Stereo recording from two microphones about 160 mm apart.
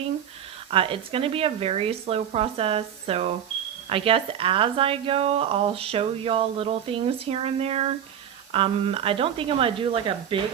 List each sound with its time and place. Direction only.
0.7 s speech: 35° right (ahead or behind)